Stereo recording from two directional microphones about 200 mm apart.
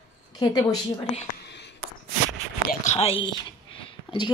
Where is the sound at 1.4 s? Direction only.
60° left (ahead or behind).